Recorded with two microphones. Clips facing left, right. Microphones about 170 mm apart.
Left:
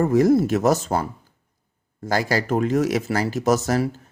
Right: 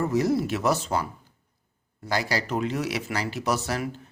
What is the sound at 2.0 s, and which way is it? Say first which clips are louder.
Speech: left 5 dB; 45° left (ahead or behind).